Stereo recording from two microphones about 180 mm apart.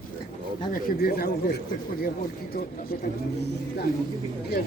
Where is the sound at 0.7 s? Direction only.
60° left (ahead or behind).